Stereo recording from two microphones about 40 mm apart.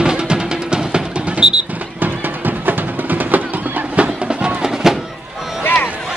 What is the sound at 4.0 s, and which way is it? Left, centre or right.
Music, right.